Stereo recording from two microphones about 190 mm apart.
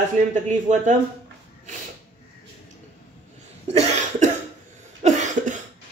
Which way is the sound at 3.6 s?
35° right (ahead or behind).